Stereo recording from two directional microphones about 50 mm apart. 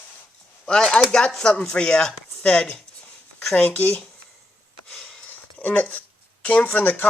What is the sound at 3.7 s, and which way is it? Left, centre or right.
Speech, left.